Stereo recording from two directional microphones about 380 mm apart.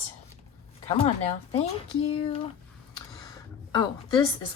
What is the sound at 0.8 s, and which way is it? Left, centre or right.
Speech, centre.